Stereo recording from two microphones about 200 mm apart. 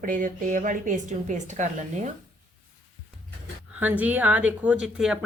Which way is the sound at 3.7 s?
10° right (ahead or behind).